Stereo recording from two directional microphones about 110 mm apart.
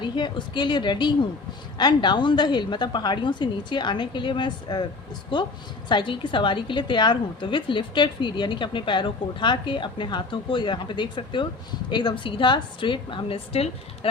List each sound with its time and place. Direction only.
0.0 s a woman's voice: 45° left (ahead or behind)
5.9 s a woman's voice: 45° left (ahead or behind)